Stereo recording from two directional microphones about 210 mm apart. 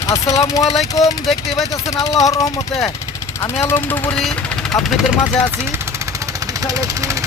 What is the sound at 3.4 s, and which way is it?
Speech, 10° left (ahead or behind).